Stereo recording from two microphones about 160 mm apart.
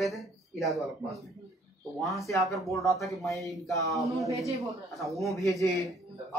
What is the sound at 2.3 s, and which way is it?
Speech, 20° left (ahead or behind).